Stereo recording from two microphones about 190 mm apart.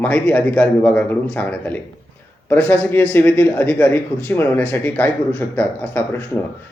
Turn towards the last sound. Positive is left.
turn(degrees=10)  # may be behind; listen again after turning